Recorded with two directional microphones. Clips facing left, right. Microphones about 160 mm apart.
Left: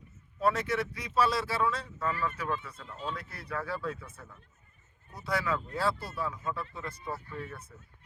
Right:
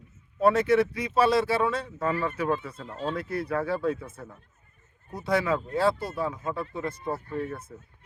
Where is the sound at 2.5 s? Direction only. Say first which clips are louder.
Right 7 dB; 50° right (ahead or behind).